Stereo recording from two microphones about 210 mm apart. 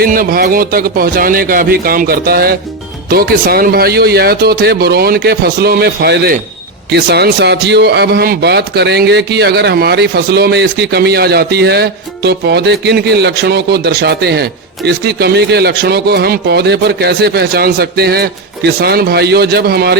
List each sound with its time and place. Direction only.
0.0 s speech: 45° right (ahead or behind)